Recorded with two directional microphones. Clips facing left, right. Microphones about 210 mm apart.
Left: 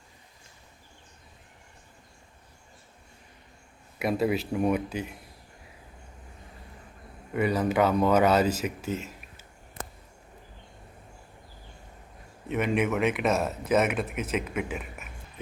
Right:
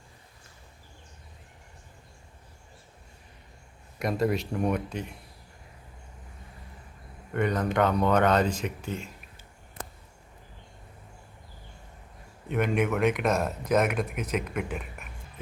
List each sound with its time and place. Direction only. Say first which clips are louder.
3.9 s speech: left 1 dB; 5° left (ahead or behind)
7.3 s speech: left 1 dB; 5° left (ahead or behind)
12.5 s speech: even; centre (ahead or behind)